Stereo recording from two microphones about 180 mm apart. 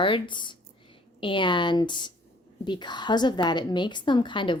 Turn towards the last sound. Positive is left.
turn(degrees=25)  # may be behind; listen again after turning